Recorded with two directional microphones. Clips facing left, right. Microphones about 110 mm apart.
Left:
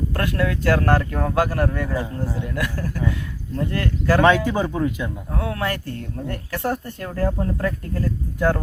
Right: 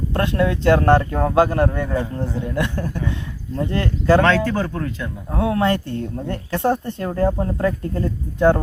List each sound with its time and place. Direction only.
0.1 s speech: 25° right (ahead or behind)
4.2 s speech: 15° left (ahead or behind)
5.3 s speech: 25° right (ahead or behind)